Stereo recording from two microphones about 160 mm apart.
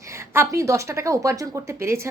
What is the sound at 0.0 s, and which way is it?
A woman's voice, 20° right (ahead or behind).